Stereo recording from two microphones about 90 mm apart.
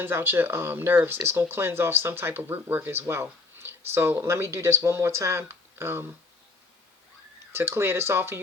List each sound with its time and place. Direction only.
0.0 s speech: 25° right (ahead or behind)
7.5 s speech: 30° right (ahead or behind)